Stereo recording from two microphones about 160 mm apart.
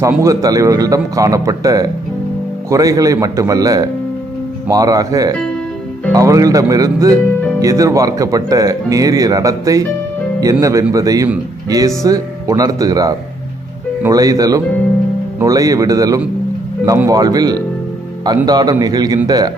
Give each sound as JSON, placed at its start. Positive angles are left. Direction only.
{"t": 0.2, "sound": "speech", "side_deg": -20}